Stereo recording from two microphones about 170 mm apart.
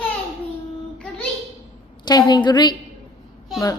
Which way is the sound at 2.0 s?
25° left (ahead or behind).